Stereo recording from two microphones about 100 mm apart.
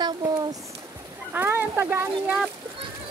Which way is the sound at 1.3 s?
20° right (ahead or behind).